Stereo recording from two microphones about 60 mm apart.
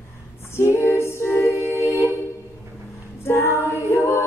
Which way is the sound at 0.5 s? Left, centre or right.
Left.